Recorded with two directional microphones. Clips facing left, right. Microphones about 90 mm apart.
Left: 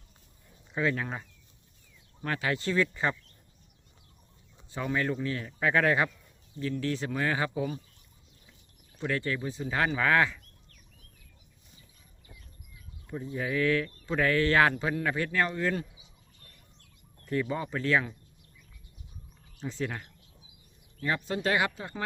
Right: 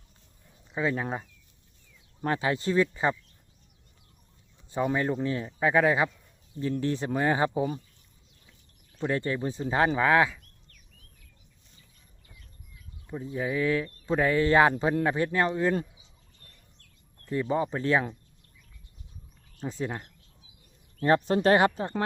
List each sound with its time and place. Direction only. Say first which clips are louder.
0.8 s speech: right 1 dB; 20° right (ahead or behind)
2.2 s speech: right 3 dB; 25° right (ahead or behind)
4.7 s speech: right 4 dB; 20° right (ahead or behind)
6.6 s speech: right 3 dB; 25° right (ahead or behind)
9.0 s speech: right 3 dB; 25° right (ahead or behind)
13.1 s speech: right 2 dB; 10° right (ahead or behind)
17.2 s speech: right 3 dB; 25° right (ahead or behind)
19.5 s speech: right 2 dB; 10° right (ahead or behind)
19.8 s speech: right 1 dB; 20° right (ahead or behind)
21.0 s speech: right 8 dB; 40° right (ahead or behind)